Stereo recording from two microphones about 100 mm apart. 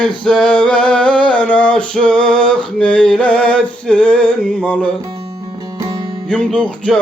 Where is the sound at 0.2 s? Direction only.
5° left (ahead or behind).